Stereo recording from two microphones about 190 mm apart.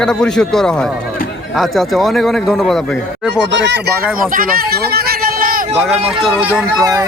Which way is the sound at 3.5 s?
70° right (ahead or behind).